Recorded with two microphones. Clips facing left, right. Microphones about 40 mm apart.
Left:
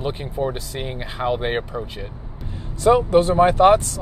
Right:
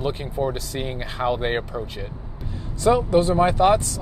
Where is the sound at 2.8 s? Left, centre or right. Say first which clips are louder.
Left 3 dB; left.